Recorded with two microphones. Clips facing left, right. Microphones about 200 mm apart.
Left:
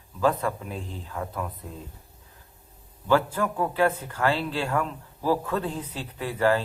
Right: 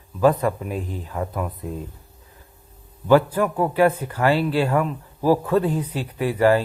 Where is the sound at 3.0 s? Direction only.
15° right (ahead or behind).